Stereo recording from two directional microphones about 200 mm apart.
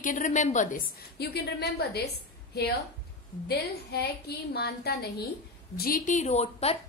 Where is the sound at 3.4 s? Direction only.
55° left (ahead or behind).